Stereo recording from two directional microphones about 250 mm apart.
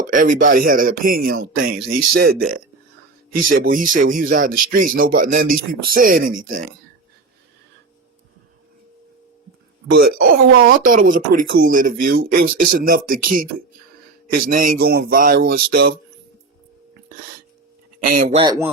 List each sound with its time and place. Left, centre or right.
0.0 s a man's voice: right
3.6 s a man's voice: right
9.9 s a man's voice: right
18.0 s a man's voice: right
18.3 s speech: centre